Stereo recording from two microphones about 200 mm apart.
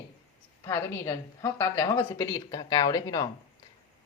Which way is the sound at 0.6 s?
15° left (ahead or behind).